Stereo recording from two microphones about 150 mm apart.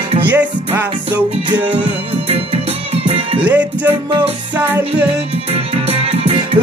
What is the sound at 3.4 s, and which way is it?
Music, 10° right (ahead or behind).